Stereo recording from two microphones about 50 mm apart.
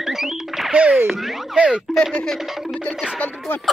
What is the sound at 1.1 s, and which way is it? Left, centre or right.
Speech, centre.